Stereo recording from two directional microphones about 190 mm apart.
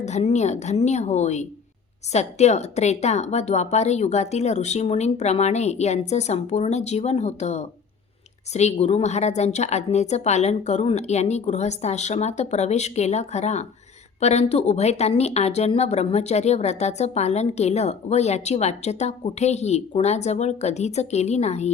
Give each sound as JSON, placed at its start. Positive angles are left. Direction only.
{"t": 0.0, "sound": "a woman's voice", "side_deg": 35}